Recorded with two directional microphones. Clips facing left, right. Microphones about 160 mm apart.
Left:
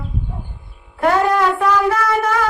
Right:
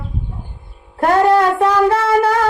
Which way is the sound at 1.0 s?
30° right (ahead or behind).